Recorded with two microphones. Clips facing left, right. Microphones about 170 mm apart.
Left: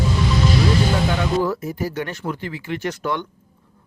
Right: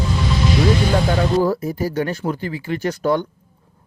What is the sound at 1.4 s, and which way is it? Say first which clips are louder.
A man's voice: right 3 dB; 35° right (ahead or behind).